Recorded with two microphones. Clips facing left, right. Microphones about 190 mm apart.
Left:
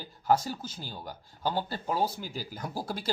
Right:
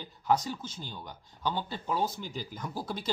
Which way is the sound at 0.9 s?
40° left (ahead or behind).